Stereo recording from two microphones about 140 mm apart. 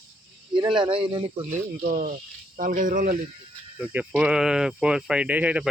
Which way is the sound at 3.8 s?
10° right (ahead or behind).